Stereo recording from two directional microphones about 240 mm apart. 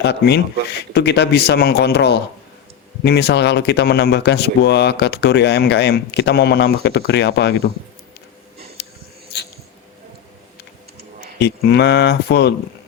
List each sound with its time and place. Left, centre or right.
0.0 s speech: left
11.3 s speech: left